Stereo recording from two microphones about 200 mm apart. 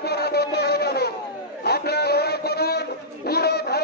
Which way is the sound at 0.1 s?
50° left (ahead or behind).